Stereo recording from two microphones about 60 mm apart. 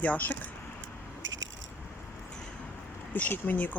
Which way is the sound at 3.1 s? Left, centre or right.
Left.